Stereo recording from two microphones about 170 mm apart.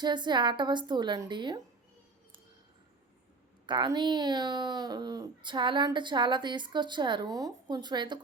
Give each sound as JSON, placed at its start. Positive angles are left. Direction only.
{"t": 0.0, "sound": "speech", "side_deg": -25}
{"t": 3.7, "sound": "speech", "side_deg": -25}